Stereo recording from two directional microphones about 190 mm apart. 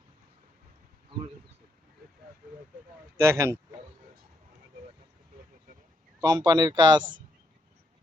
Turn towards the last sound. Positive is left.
turn(degrees=-25)  # may be behind; listen again after turning